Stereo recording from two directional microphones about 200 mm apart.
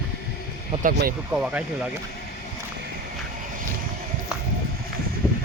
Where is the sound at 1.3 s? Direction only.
5° right (ahead or behind).